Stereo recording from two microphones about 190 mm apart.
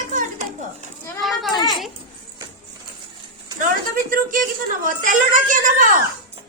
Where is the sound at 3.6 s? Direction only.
45° right (ahead or behind).